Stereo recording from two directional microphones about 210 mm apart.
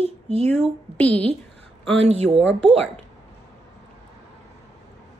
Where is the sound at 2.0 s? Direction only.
30° right (ahead or behind).